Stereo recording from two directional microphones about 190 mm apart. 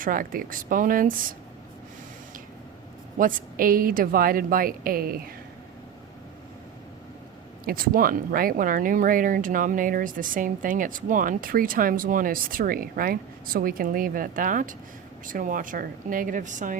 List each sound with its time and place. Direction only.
0.0 s speech: 45° right (ahead or behind)
3.2 s speech: 45° right (ahead or behind)
7.6 s speech: 50° right (ahead or behind)